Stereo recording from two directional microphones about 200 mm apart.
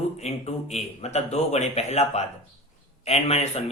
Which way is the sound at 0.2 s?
35° left (ahead or behind).